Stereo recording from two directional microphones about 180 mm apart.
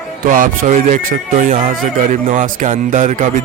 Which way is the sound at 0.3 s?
50° right (ahead or behind).